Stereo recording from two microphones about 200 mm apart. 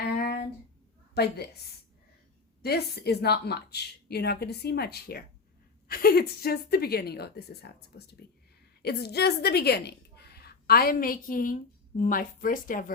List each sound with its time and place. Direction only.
0.2 s a sound: 50° left (ahead or behind)
1.1 s a woman's voice: 55° left (ahead or behind)
2.6 s a woman's voice: 50° left (ahead or behind)